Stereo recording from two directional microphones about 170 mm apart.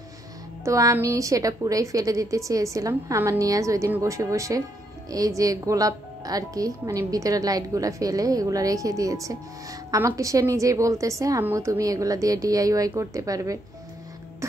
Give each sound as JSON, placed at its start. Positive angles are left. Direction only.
{"t": 0.7, "sound": "a woman's voice", "side_deg": -20}